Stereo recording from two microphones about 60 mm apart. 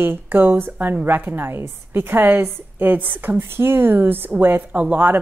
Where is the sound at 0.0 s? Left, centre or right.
Right.